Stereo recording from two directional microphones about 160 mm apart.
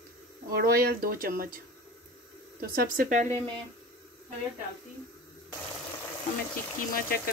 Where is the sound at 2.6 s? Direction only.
70° right (ahead or behind).